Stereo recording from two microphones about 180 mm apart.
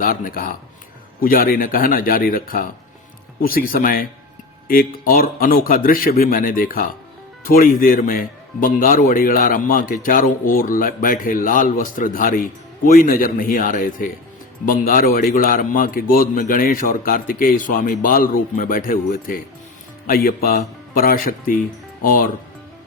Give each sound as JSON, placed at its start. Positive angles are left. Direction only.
{"t": 0.0, "sound": "a man's voice", "side_deg": 50}